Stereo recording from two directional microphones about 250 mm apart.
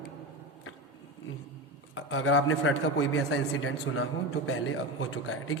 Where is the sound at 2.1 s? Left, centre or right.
Left.